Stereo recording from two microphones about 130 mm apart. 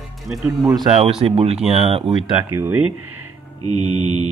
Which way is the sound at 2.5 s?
15° right (ahead or behind).